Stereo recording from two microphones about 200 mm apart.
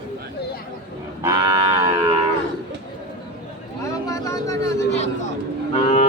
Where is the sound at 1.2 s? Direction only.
15° right (ahead or behind).